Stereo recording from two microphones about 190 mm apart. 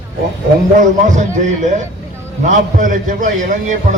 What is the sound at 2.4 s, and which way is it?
A man's voice, 45° right (ahead or behind).